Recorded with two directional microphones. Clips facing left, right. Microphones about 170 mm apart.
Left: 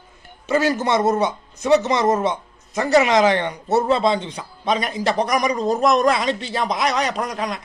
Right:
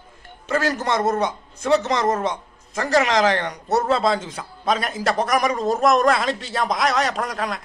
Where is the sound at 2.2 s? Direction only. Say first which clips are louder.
Left 3 dB; 25° left (ahead or behind).